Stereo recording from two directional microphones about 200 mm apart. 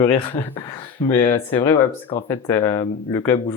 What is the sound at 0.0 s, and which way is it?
Speech, 25° left (ahead or behind).